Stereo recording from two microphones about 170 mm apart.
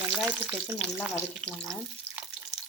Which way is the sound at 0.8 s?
5° left (ahead or behind).